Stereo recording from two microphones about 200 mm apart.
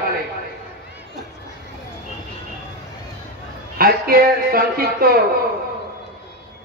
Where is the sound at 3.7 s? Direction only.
45° right (ahead or behind).